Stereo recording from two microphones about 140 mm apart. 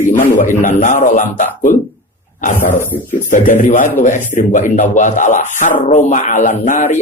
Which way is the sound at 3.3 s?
65° left (ahead or behind).